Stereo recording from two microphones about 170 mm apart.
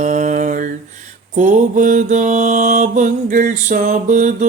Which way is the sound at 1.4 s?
50° right (ahead or behind).